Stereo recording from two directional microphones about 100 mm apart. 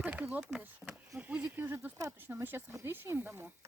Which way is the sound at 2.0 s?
20° right (ahead or behind).